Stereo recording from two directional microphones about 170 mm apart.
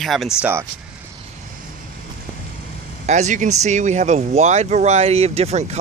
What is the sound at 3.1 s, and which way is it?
Speech, 45° right (ahead or behind).